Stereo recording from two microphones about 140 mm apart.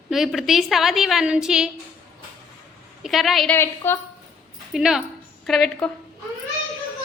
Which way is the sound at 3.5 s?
15° left (ahead or behind).